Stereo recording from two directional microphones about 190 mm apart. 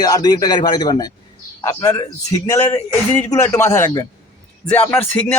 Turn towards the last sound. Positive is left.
turn(degrees=10)  # may be behind; listen again after turning